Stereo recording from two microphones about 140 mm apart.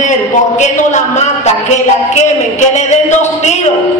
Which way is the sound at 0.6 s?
55° left (ahead or behind).